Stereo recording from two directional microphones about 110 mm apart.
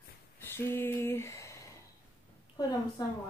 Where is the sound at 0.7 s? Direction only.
20° left (ahead or behind).